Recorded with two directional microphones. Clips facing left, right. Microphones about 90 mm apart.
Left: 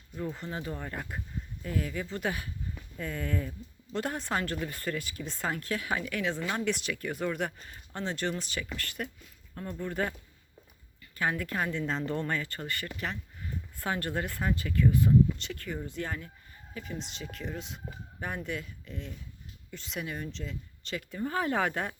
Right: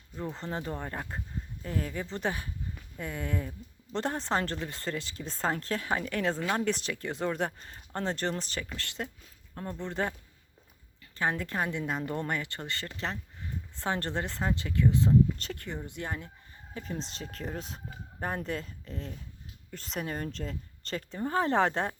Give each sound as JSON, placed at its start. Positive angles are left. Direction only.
{"t": 0.2, "sound": "speech", "side_deg": -30}
{"t": 11.2, "sound": "speech", "side_deg": -25}
{"t": 16.7, "sound": "speech", "side_deg": -35}